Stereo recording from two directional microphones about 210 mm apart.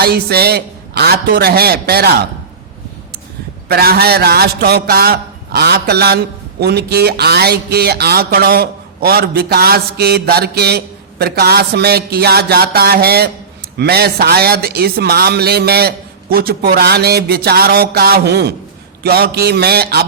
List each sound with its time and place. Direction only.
0.0 s speech: 50° right (ahead or behind)
3.7 s speech: 45° right (ahead or behind)